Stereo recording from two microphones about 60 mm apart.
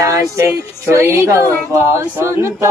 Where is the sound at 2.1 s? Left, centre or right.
Right.